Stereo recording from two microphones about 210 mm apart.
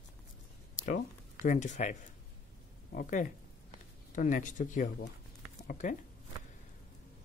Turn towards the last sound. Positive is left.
turn(degrees=40)  # may be behind; listen again after turning